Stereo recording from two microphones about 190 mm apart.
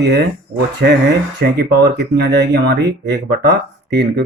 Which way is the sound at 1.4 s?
60° right (ahead or behind).